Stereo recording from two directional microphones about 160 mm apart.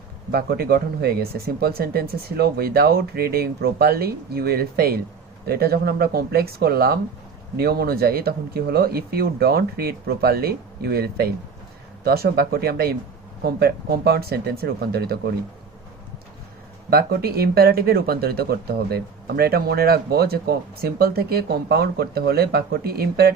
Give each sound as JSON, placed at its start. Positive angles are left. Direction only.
{"t": 0.3, "sound": "speech", "side_deg": -75}
{"t": 16.9, "sound": "speech", "side_deg": -75}